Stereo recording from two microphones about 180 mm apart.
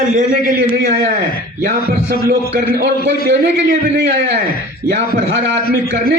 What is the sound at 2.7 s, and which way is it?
A man's voice, 60° right (ahead or behind).